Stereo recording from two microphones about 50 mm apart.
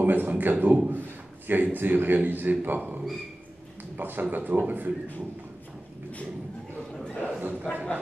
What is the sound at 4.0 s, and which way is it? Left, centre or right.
Speech, right.